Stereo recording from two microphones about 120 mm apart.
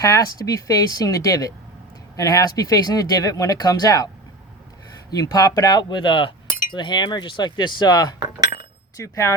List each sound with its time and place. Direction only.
0.0 s speech: 30° left (ahead or behind)
5.1 s speech: 30° left (ahead or behind)